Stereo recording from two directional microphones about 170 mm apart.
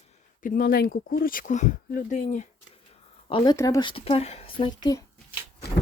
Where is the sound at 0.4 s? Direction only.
60° left (ahead or behind).